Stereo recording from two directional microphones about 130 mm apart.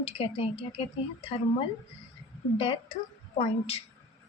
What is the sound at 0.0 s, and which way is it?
Speech, 50° left (ahead or behind).